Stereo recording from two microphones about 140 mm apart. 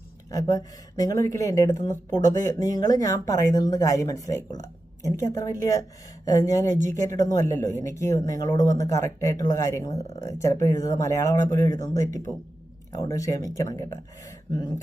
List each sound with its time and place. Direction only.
0.3 s speech: 20° left (ahead or behind)